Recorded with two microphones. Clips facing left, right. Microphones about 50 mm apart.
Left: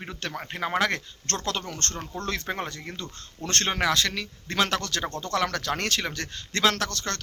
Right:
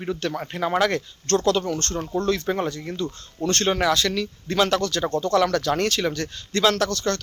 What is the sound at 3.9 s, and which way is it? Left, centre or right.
A man's voice, left.